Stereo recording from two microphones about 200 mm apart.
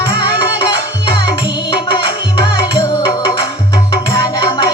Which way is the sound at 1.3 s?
25° left (ahead or behind).